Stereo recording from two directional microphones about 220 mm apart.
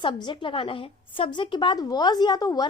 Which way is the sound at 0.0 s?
20° left (ahead or behind).